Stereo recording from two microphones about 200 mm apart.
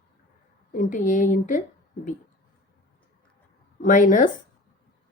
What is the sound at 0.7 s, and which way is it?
Speech, 40° left (ahead or behind).